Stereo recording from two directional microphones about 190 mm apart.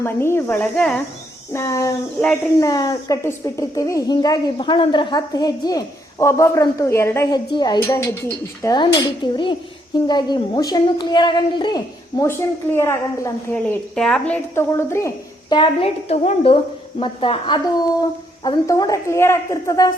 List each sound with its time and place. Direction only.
0.0 s a woman's voice: 15° left (ahead or behind)
1.5 s a woman's voice: 15° left (ahead or behind)